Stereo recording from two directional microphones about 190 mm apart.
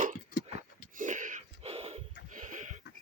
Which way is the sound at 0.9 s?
40° right (ahead or behind).